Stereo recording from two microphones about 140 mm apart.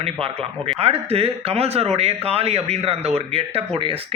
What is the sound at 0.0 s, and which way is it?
Speech, 45° right (ahead or behind).